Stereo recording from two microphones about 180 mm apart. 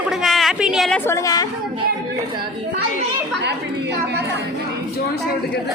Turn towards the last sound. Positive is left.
turn(degrees=-70)  # may be behind; listen again after turning